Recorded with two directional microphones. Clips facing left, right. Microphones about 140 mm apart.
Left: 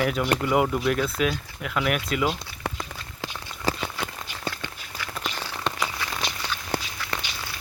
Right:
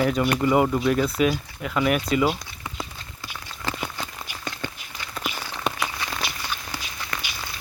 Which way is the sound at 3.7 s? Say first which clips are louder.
Left 4 dB; 35° left (ahead or behind).